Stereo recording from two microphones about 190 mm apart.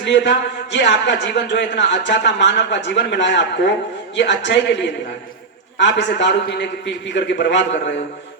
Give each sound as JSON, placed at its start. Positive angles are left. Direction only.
{"t": 0.0, "sound": "a man's voice", "side_deg": 70}
{"t": 5.8, "sound": "a man's voice", "side_deg": 70}